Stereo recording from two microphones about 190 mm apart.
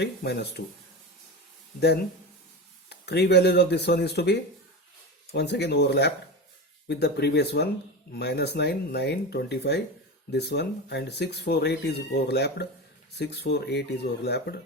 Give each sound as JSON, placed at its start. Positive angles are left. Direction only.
{"t": 0.0, "sound": "speech", "side_deg": 60}
{"t": 2.9, "sound": "speech", "side_deg": 60}